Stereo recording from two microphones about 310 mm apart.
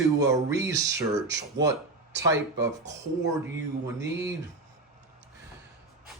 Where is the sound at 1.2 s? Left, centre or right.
Centre.